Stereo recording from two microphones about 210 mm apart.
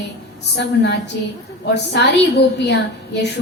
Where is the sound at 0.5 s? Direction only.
55° left (ahead or behind).